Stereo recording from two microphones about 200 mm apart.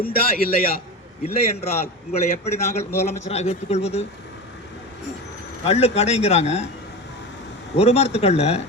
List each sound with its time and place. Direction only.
0.0 s a man's voice: 50° left (ahead or behind)
1.2 s a man's voice: 30° left (ahead or behind)
5.6 s a man's voice: 30° left (ahead or behind)
7.8 s a man's voice: 30° left (ahead or behind)